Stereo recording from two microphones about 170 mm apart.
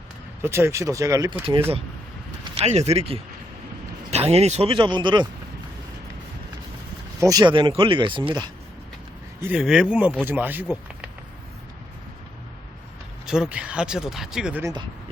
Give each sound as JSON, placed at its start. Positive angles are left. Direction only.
{"t": 0.4, "sound": "speech", "side_deg": -15}
{"t": 2.6, "sound": "speech", "side_deg": -40}
{"t": 7.2, "sound": "speech", "side_deg": -20}
{"t": 9.4, "sound": "speech", "side_deg": -5}
{"t": 13.2, "sound": "speech", "side_deg": -5}
{"t": 14.6, "sound": "speech", "side_deg": -25}